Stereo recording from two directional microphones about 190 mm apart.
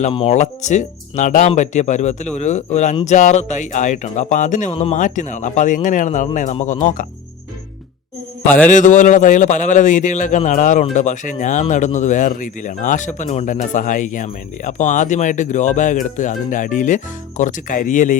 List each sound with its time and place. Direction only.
0.0 s speech: 30° left (ahead or behind)
8.4 s mantra: 5° left (ahead or behind)
8.7 s speech: 40° left (ahead or behind)